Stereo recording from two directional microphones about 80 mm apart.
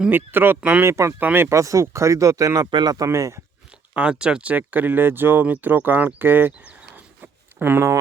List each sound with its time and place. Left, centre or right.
0.1 s speech: right
0.9 s speech: right
1.2 s speech: right
1.5 s speech: right
2.6 s speech: right
2.9 s speech: right
3.9 s speech: centre
6.6 s a sound: centre; by 7.9 s right